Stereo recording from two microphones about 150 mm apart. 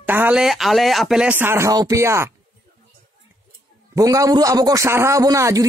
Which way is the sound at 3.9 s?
25° right (ahead or behind).